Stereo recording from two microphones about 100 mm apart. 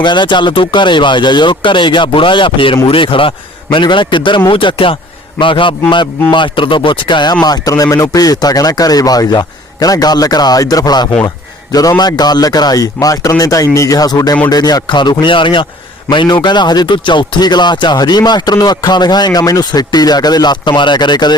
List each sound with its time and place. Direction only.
0.0 s a man's voice: 50° left (ahead or behind)